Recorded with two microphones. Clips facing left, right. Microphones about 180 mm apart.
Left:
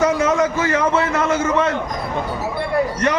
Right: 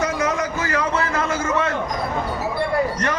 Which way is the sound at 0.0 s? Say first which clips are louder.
Left 6 dB; 25° left (ahead or behind).